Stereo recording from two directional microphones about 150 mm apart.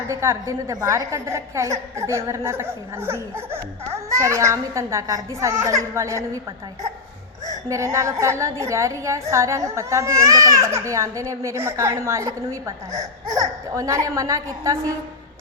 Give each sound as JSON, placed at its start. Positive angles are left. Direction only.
{"t": 0.1, "sound": "a woman's voice", "side_deg": -20}
{"t": 7.7, "sound": "a woman's voice", "side_deg": -20}